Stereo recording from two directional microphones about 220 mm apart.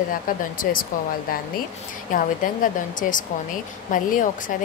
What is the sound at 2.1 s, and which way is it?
A woman's voice, 40° left (ahead or behind).